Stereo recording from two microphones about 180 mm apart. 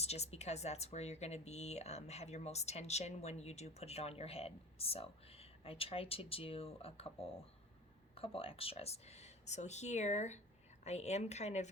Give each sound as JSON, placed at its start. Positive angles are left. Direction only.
{"t": 0.0, "sound": "speech", "side_deg": 35}
{"t": 8.1, "sound": "speech", "side_deg": 30}